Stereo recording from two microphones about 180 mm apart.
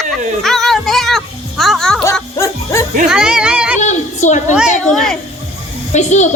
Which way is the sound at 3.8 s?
40° left (ahead or behind).